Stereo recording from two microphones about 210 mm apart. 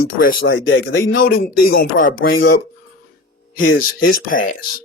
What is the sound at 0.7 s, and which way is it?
Speech, 60° left (ahead or behind).